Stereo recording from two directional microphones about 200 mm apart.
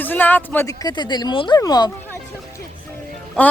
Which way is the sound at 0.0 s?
10° left (ahead or behind).